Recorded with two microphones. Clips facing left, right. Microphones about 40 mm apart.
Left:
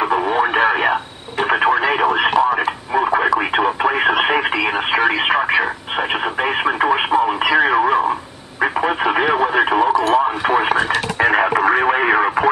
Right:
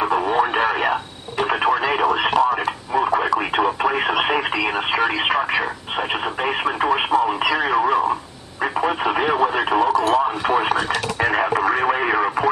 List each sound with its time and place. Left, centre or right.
0.0 s radio: centre